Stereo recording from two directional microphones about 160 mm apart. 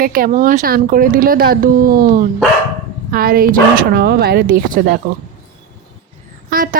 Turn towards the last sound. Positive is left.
turn(degrees=-60)  # may be behind; listen again after turning